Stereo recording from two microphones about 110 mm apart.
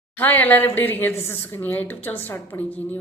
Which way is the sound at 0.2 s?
15° left (ahead or behind).